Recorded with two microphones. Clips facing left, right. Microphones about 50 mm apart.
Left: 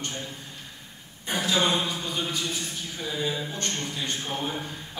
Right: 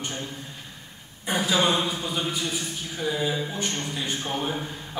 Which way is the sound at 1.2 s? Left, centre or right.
Centre.